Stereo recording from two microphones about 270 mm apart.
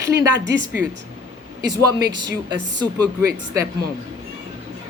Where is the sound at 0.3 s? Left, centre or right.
Right.